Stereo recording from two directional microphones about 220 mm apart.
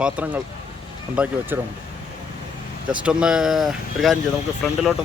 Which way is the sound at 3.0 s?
5° right (ahead or behind).